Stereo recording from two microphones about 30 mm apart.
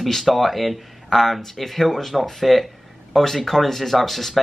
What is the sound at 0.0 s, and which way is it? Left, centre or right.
Speech, centre.